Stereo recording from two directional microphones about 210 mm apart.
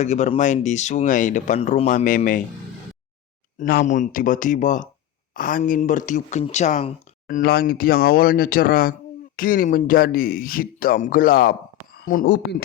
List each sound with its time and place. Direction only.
0.0 s speech: 35° left (ahead or behind)
3.6 s speech: 40° left (ahead or behind)